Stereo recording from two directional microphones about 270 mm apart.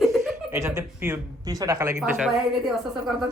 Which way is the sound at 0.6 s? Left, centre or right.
Centre.